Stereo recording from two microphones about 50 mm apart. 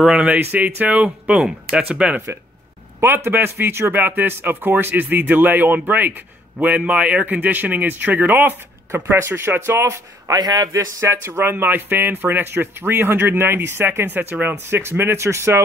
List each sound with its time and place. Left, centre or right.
0.2 s speech: right
3.0 s speech: right
11.3 s speech: right
14.7 s speech: right
15.1 s speech: right